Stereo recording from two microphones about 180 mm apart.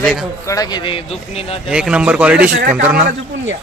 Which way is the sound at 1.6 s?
5° right (ahead or behind).